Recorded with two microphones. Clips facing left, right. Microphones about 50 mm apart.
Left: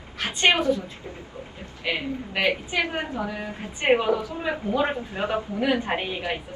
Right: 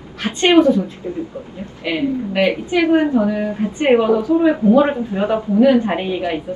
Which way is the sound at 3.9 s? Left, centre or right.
Centre.